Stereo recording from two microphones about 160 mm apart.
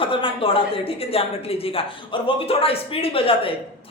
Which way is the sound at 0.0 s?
35° left (ahead or behind).